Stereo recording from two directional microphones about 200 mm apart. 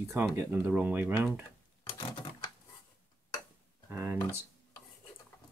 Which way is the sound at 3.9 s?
10° right (ahead or behind).